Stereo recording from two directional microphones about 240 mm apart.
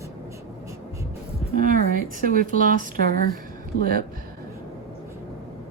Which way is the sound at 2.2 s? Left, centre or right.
Right.